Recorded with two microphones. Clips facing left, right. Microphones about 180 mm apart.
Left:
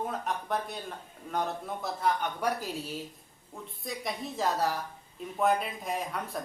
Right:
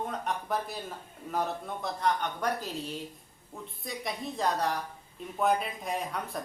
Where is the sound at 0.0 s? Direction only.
Centre (ahead or behind).